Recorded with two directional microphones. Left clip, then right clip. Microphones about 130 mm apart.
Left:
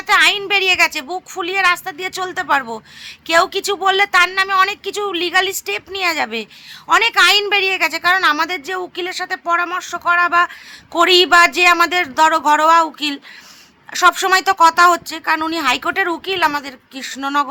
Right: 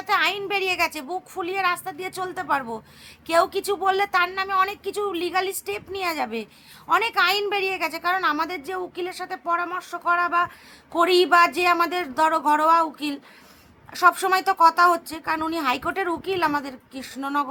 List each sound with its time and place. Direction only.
0.1 s speech: 25° left (ahead or behind)